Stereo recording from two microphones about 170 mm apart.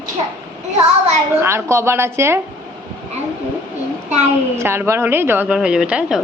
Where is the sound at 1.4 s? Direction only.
15° right (ahead or behind).